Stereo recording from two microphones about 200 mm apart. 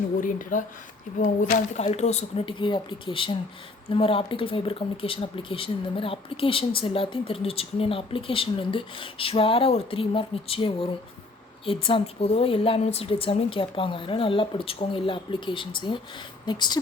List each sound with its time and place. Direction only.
0.2 s speech: 40° left (ahead or behind); by 16.7 s 20° left (ahead or behind)